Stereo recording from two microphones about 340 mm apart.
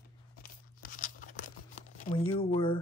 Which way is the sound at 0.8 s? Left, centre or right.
Left.